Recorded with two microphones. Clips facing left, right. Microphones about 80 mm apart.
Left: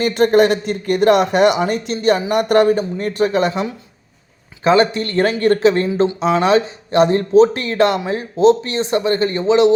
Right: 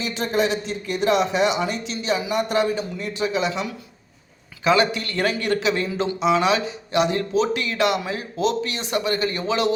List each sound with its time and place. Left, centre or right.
0.0 s a man's voice: left
4.6 s speech: left